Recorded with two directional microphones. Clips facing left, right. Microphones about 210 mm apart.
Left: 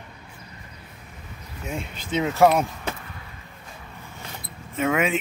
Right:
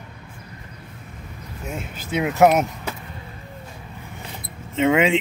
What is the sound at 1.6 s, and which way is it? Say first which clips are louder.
Speech: even; 5° right (ahead or behind).